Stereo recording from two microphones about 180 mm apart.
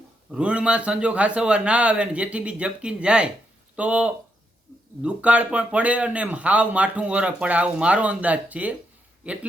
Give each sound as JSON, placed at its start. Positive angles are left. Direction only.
{"t": 0.3, "sound": "a man's voice", "side_deg": -5}